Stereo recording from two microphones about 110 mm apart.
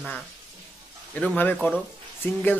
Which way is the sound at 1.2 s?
15° left (ahead or behind).